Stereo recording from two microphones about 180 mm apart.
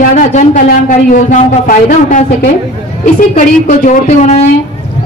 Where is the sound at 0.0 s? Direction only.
45° left (ahead or behind).